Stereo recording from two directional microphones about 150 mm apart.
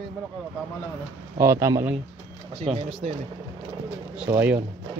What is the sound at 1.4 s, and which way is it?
Speech, 20° right (ahead or behind).